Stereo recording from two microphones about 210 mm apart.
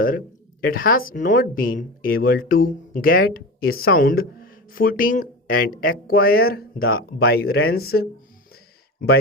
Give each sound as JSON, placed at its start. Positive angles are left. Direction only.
{"t": 0.6, "sound": "speech", "side_deg": 45}